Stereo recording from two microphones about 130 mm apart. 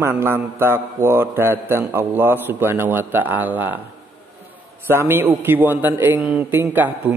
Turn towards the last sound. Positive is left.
turn(degrees=-15)  # may be behind; listen again after turning